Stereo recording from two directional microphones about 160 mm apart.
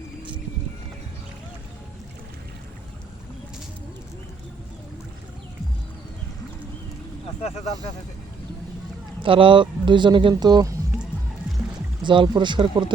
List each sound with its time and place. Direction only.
9.2 s speech: 35° right (ahead or behind)
12.0 s speech: 30° right (ahead or behind)